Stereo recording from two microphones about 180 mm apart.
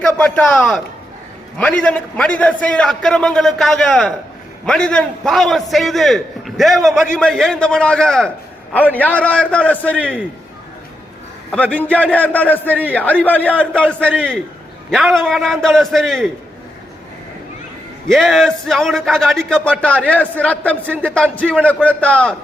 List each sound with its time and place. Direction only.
0.0 s a man's voice: 5° left (ahead or behind)
11.5 s a man's voice: 10° left (ahead or behind)
18.1 s a man's voice: centre (ahead or behind)